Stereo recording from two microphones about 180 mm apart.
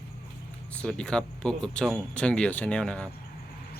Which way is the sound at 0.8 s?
5° left (ahead or behind).